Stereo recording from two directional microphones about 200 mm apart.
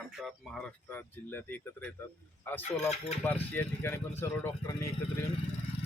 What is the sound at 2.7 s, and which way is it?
Speech, 30° left (ahead or behind).